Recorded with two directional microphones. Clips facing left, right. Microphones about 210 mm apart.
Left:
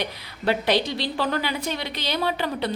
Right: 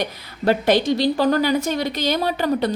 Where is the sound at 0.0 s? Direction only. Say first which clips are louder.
Right 5 dB; 45° right (ahead or behind).